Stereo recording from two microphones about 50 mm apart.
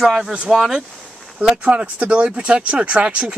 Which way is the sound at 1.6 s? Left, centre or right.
Right.